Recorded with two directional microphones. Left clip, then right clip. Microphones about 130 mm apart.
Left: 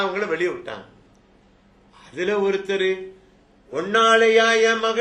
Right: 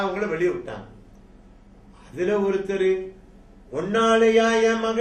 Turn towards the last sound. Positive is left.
turn(degrees=30)  # may be behind; listen again after turning